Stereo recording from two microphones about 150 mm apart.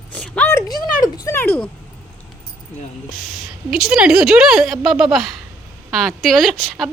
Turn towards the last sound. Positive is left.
turn(degrees=0)  # may be behind; listen again after turning